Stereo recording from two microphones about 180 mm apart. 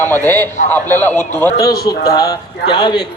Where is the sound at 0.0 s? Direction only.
10° left (ahead or behind).